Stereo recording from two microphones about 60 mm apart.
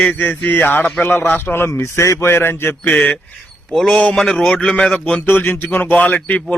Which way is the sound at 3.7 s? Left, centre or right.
Centre.